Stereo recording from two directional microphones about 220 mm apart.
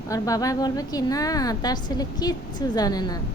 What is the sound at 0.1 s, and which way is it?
A woman's voice, 15° left (ahead or behind).